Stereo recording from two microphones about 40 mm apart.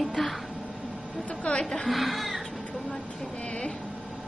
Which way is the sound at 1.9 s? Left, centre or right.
Centre.